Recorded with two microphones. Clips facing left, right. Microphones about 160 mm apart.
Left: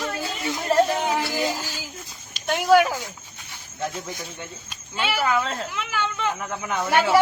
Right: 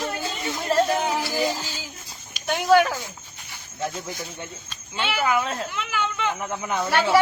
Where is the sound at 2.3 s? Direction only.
Centre (ahead or behind).